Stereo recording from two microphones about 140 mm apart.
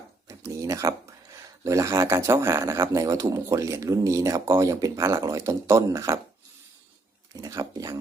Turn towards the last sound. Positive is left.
turn(degrees=-20)  # may be behind; listen again after turning